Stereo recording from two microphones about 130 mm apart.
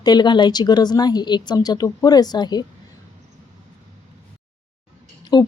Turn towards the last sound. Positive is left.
turn(degrees=35)  # may be behind; listen again after turning